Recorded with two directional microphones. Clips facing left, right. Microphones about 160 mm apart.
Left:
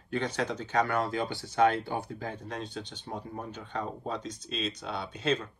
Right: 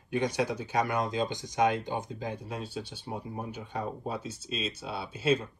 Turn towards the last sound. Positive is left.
turn(degrees=-5)  # may be behind; listen again after turning